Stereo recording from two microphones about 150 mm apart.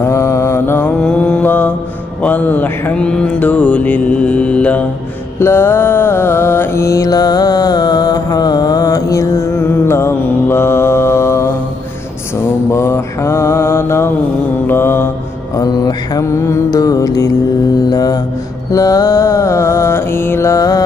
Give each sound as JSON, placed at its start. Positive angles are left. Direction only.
{"t": 0.0, "sound": "mantra", "side_deg": 20}
{"t": 12.7, "sound": "mantra", "side_deg": 20}